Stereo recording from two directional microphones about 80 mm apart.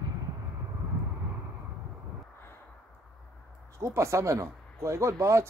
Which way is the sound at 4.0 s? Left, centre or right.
Right.